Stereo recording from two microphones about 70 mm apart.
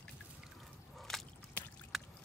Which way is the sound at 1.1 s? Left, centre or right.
Centre.